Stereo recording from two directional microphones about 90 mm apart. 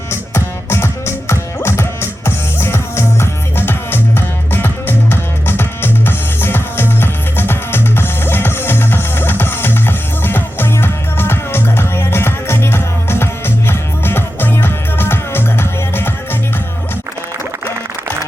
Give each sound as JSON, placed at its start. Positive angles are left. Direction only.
{"t": 0.1, "sound": "music", "side_deg": 30}